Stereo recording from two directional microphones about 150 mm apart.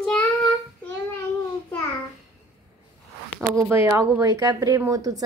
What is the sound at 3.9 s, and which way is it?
A child's voice, 20° right (ahead or behind).